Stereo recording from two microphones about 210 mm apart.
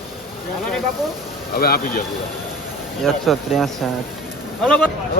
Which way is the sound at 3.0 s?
Centre (ahead or behind).